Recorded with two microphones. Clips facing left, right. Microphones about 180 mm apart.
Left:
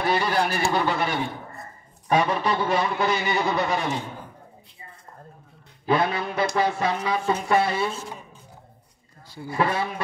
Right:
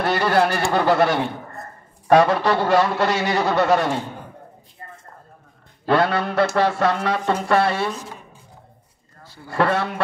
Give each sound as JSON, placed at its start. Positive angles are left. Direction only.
{"t": 0.0, "sound": "a man's voice", "side_deg": -70}
{"t": 5.9, "sound": "a man's voice", "side_deg": -70}
{"t": 9.5, "sound": "a man's voice", "side_deg": -75}